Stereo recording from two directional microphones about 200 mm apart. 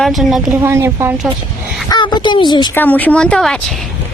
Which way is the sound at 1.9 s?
20° left (ahead or behind).